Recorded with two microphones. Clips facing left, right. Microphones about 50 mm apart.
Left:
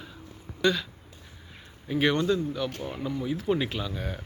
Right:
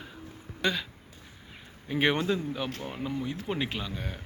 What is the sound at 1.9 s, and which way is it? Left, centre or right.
Speech, centre.